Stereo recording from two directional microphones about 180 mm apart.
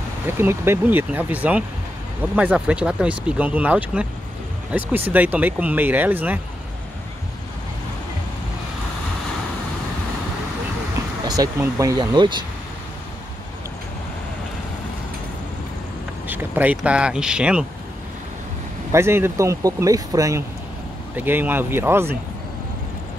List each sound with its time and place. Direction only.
0.4 s speech: 15° right (ahead or behind)
11.2 s speech: 20° right (ahead or behind)
16.3 s speech: 10° right (ahead or behind)
18.9 s speech: 15° right (ahead or behind)